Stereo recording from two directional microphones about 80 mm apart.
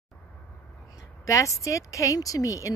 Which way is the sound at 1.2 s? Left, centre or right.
Left.